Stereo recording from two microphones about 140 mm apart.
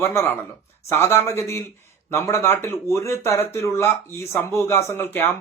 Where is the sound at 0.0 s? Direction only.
20° left (ahead or behind).